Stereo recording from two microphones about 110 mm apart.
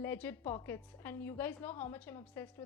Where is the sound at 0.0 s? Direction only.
15° left (ahead or behind).